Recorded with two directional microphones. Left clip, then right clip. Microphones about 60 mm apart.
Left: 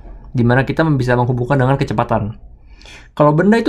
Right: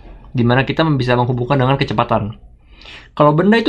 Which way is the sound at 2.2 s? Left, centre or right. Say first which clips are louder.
Right 1 dB; centre.